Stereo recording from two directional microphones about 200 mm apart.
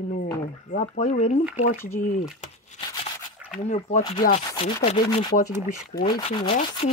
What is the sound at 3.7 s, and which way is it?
Speech, 35° left (ahead or behind).